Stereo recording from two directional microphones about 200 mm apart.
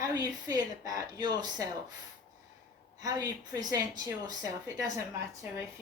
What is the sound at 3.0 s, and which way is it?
A woman's voice, 15° right (ahead or behind).